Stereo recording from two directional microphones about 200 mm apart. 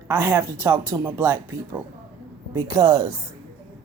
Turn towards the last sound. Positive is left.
turn(degrees=-20)  # may be behind; listen again after turning